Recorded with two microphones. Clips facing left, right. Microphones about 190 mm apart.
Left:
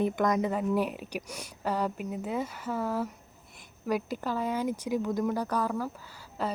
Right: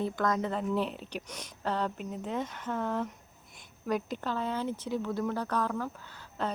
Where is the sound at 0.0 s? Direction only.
15° left (ahead or behind).